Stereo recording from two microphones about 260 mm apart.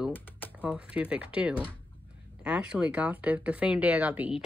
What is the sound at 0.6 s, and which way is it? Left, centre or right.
Speech, centre.